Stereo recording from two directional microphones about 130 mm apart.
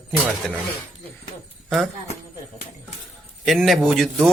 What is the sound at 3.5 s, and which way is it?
Speech, centre (ahead or behind).